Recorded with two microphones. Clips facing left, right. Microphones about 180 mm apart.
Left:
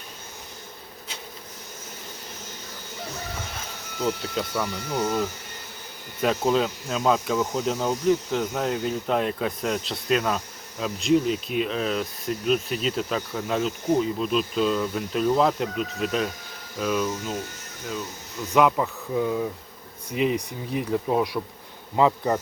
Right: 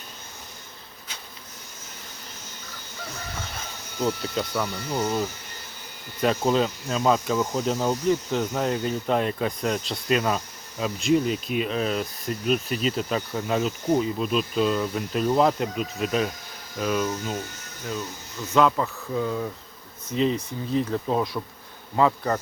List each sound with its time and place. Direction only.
4.0 s speech: centre (ahead or behind)
6.2 s speech: centre (ahead or behind)
18.5 s speech: 15° left (ahead or behind)